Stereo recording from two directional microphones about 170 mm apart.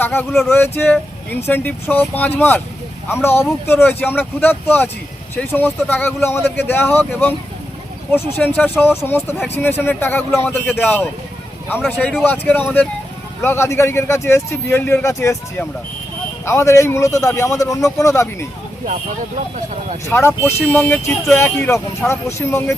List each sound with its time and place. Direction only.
0.0 s speech: 10° left (ahead or behind)
8.4 s speech: 10° left (ahead or behind)
20.1 s speech: 15° left (ahead or behind)